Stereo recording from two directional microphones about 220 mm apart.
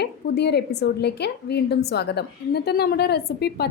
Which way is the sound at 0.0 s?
50° left (ahead or behind).